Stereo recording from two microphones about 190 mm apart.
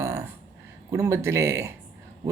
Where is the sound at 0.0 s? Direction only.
15° right (ahead or behind).